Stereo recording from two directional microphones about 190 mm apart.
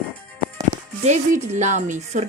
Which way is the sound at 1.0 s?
40° right (ahead or behind).